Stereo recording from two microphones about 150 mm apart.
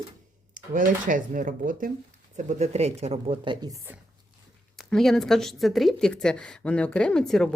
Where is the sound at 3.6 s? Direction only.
20° right (ahead or behind).